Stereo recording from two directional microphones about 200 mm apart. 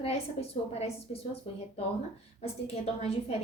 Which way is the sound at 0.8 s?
30° left (ahead or behind).